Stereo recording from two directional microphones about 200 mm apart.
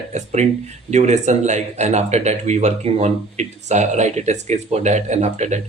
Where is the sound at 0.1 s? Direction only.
35° right (ahead or behind).